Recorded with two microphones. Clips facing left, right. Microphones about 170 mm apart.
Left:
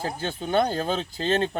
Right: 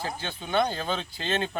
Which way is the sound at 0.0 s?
40° left (ahead or behind).